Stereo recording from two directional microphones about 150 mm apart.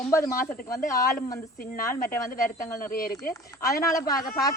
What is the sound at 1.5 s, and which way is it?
Speech, 75° left (ahead or behind).